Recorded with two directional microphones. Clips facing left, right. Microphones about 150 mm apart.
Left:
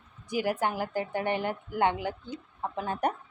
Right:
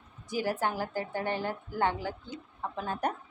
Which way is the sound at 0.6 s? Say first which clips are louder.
Left 2 dB; 15° left (ahead or behind).